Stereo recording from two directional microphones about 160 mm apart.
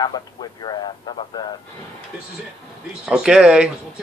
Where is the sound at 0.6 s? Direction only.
30° left (ahead or behind).